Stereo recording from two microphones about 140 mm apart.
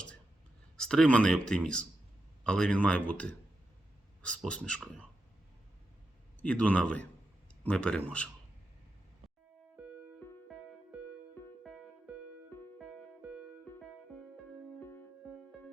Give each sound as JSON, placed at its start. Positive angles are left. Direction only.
{"t": 0.8, "sound": "speech", "side_deg": 5}
{"t": 6.4, "sound": "speech", "side_deg": 10}
{"t": 11.6, "sound": "music", "side_deg": -5}
{"t": 13.2, "sound": "music", "side_deg": -5}
{"t": 14.8, "sound": "music", "side_deg": 15}